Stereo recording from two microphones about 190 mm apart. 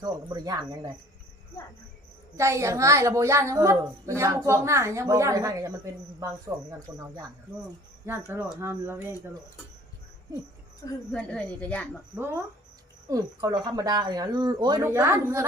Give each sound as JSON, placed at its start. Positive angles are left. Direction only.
{"t": 0.0, "sound": "speech", "side_deg": -20}
{"t": 2.3, "sound": "a woman's voice", "side_deg": -15}
{"t": 11.1, "sound": "a woman's voice", "side_deg": 5}
{"t": 12.1, "sound": "a woman's voice", "side_deg": -10}